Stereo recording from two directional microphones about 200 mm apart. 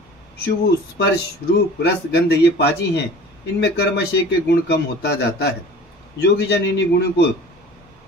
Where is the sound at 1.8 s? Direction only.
60° left (ahead or behind).